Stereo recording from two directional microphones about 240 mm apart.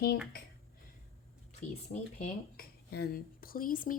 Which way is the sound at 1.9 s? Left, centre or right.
Left.